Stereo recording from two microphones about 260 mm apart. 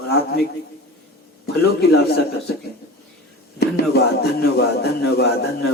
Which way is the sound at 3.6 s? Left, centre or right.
Left.